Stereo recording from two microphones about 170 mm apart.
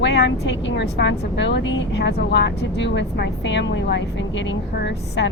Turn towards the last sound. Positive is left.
turn(degrees=90)